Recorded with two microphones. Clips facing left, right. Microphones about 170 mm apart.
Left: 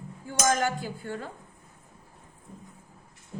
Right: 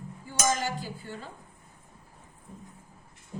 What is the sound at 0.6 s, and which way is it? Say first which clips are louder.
Speech: left 4 dB; 55° left (ahead or behind).